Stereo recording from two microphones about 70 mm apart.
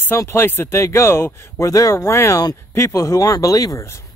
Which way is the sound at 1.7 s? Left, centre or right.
Left.